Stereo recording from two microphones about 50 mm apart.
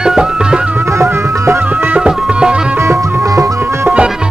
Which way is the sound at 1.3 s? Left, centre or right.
Right.